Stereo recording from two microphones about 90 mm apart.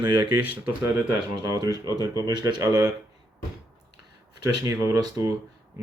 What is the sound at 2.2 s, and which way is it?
Speech, 50° right (ahead or behind).